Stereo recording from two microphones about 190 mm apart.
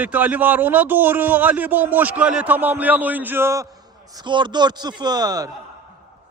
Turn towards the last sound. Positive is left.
turn(degrees=-20)  # may be behind; listen again after turning